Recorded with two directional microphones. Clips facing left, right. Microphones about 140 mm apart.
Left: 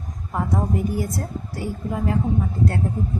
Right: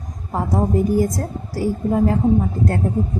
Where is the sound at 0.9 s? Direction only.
40° right (ahead or behind).